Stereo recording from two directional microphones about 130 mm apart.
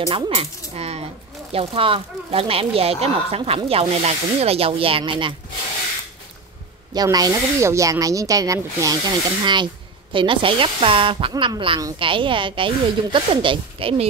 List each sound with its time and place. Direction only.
0.1 s speech: 45° right (ahead or behind)
6.9 s speech: 30° right (ahead or behind)